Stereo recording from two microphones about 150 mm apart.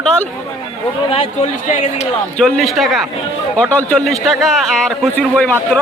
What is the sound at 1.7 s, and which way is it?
Speech, 55° left (ahead or behind).